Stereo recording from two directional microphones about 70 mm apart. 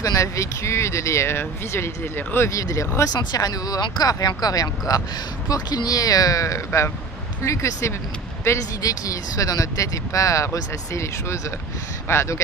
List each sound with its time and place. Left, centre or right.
0.0 s speech: left
2.5 s speech: left
3.1 s speech: left
8.8 s speech: left